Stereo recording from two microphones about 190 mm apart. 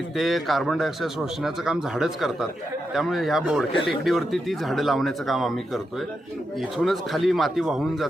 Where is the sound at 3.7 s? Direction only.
25° left (ahead or behind).